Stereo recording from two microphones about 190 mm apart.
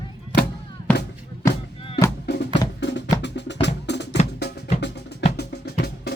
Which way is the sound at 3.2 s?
65° left (ahead or behind).